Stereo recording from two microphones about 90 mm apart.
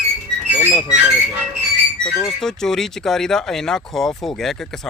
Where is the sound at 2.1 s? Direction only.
5° left (ahead or behind).